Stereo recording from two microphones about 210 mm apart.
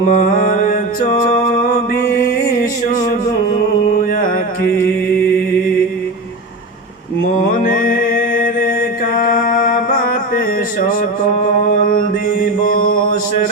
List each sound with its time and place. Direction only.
0.1 s music: 40° left (ahead or behind)
7.3 s mantra: 40° left (ahead or behind)
11.9 s mantra: 40° left (ahead or behind)